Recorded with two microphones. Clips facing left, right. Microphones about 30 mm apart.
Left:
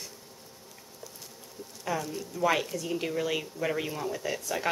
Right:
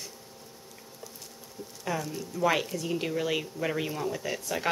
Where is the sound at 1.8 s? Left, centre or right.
Centre.